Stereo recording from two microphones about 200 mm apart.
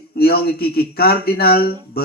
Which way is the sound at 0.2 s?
50° left (ahead or behind).